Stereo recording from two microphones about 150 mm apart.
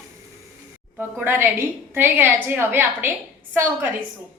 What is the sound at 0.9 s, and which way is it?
A woman's voice, 15° right (ahead or behind).